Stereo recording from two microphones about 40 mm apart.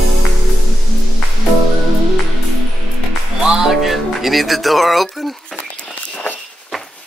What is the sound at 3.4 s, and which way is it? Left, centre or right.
Music, centre.